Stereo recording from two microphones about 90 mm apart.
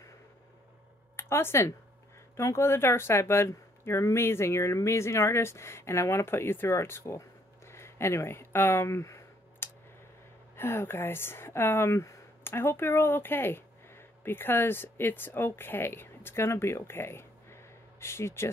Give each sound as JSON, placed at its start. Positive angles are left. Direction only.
{"t": 1.1, "sound": "speech", "side_deg": 25}